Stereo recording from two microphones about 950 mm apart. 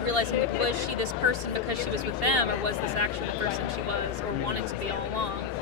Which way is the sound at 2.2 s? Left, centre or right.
Right.